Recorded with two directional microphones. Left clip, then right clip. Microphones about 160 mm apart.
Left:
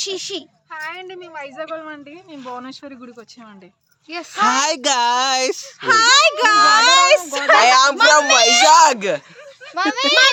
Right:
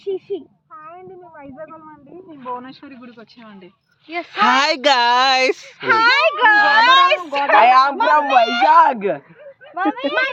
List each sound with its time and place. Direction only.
0.0 s a child's voice: 15° left (ahead or behind)
1.4 s a woman's voice: 50° left (ahead or behind)
2.5 s speech: 30° left (ahead or behind)
4.4 s speech: centre (ahead or behind); by 10.3 s 25° left (ahead or behind)